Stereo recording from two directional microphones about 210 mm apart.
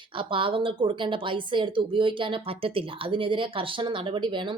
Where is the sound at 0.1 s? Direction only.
25° right (ahead or behind).